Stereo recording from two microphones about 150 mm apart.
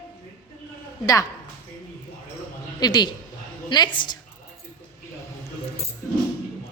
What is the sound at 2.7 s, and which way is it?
A woman's voice, 30° left (ahead or behind).